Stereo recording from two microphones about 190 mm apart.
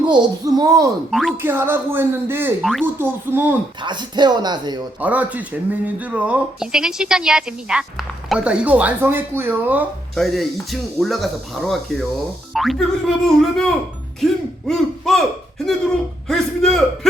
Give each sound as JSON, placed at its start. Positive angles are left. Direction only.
{"t": 0.0, "sound": "speech", "side_deg": -20}
{"t": 1.1, "sound": "speech", "side_deg": 0}
{"t": 1.4, "sound": "speech", "side_deg": -10}
{"t": 2.6, "sound": "speech", "side_deg": 0}
{"t": 2.8, "sound": "speech", "side_deg": -10}
{"t": 3.8, "sound": "speech", "side_deg": -25}
{"t": 4.9, "sound": "speech", "side_deg": -10}
{"t": 14.7, "sound": "speech", "side_deg": 0}